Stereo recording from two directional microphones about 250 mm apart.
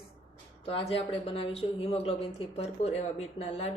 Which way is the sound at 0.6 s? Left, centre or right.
Left.